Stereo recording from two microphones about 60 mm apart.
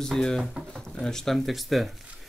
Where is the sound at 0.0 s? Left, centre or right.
Centre.